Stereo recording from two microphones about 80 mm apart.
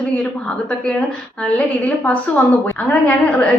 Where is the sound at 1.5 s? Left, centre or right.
Centre.